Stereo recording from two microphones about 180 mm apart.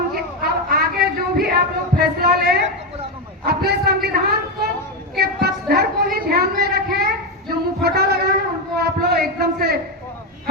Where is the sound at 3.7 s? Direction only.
60° right (ahead or behind).